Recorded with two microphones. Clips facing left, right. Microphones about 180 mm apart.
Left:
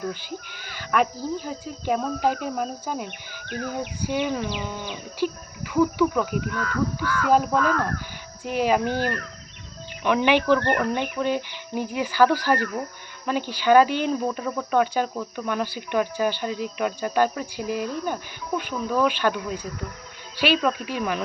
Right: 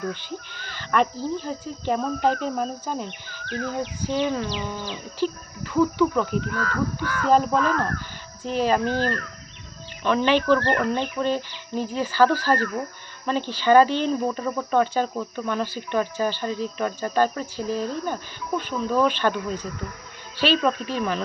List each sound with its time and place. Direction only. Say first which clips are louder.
0.1 s speech: right 1 dB; 10° left (ahead or behind)
6.5 s speech: even; 45° right (ahead or behind)
7.3 s speech: right 1 dB; 10° left (ahead or behind)